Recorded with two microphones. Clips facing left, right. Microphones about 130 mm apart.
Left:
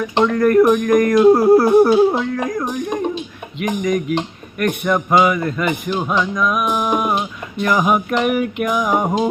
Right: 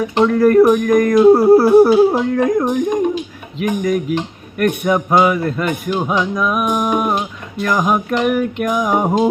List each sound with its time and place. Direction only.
0.0 s music: 10° right (ahead or behind)
2.6 s music: 15° right (ahead or behind)
3.6 s music: 5° right (ahead or behind)